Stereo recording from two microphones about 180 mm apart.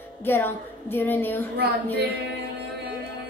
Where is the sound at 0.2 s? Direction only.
10° left (ahead or behind).